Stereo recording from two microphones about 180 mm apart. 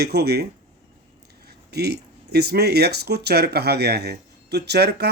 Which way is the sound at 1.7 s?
65° right (ahead or behind).